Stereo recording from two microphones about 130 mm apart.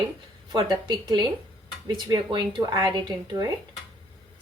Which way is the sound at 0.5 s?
35° right (ahead or behind).